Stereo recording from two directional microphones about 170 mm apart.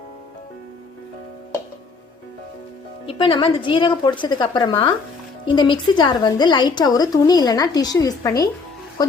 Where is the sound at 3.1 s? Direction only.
30° left (ahead or behind).